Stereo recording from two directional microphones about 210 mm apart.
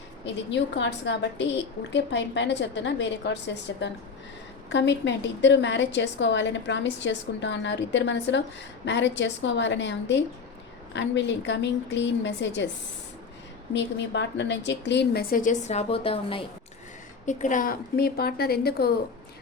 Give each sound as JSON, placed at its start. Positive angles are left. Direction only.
{"t": 0.5, "sound": "a woman's voice", "side_deg": 60}
{"t": 13.7, "sound": "speech", "side_deg": 55}
{"t": 17.2, "sound": "speech", "side_deg": 35}